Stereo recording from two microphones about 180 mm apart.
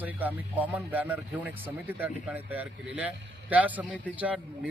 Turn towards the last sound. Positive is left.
turn(degrees=-5)  # may be behind; listen again after turning